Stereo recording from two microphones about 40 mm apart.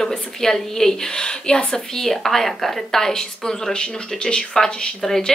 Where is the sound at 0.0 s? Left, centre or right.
Centre.